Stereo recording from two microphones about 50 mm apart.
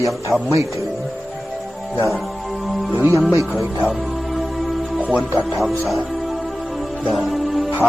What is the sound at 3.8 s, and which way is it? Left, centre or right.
Music, centre.